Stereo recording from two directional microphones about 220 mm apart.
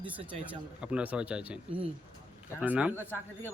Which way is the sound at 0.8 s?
5° right (ahead or behind).